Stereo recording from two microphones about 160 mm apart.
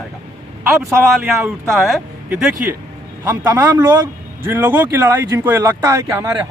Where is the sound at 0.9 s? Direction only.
15° right (ahead or behind).